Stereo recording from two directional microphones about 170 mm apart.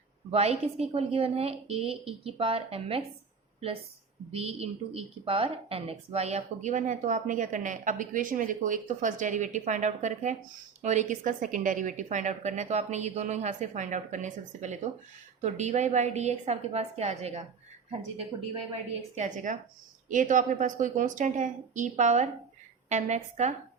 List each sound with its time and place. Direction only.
0.3 s a woman's voice: 35° right (ahead or behind)
4.3 s a woman's voice: 35° right (ahead or behind)
19.1 s a woman's voice: 45° right (ahead or behind)